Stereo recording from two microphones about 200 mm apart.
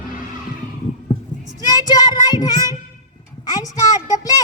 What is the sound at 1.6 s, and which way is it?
Child singing, 20° left (ahead or behind).